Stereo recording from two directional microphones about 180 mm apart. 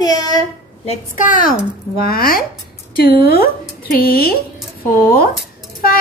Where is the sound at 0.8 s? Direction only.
45° left (ahead or behind).